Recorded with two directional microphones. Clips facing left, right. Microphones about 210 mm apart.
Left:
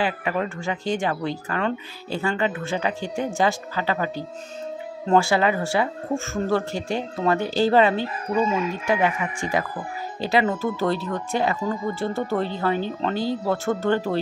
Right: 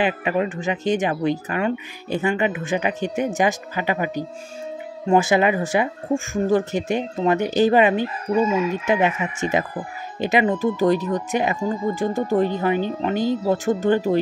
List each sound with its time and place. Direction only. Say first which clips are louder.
0.0 s speech: right 4 dB; 20° right (ahead or behind)